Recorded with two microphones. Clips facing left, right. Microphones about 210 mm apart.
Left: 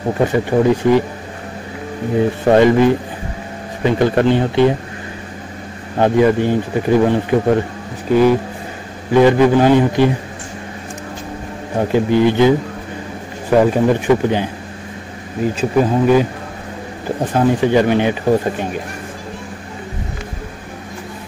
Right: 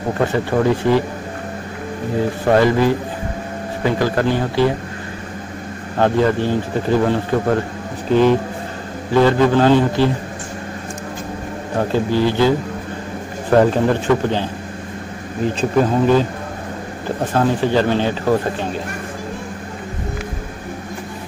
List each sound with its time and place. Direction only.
0.3 s speech: 15° left (ahead or behind)
2.5 s speech: 20° left (ahead or behind)
5.9 s speech: 15° left (ahead or behind)
11.9 s speech: 20° left (ahead or behind)